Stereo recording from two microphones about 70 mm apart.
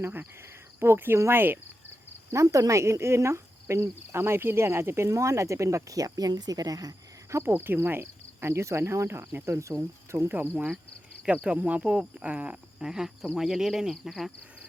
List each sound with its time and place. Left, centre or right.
0.0 s speech: right
1.2 s cricket: right
2.3 s speech: right
7.5 s cricket: right
10.2 s cricket: right
11.4 s speech: centre